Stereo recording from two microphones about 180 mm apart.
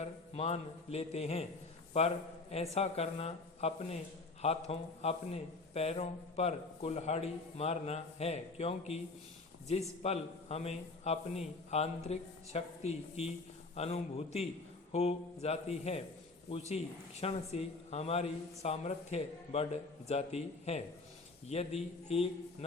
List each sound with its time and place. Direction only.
0.0 s a man's voice: 35° left (ahead or behind)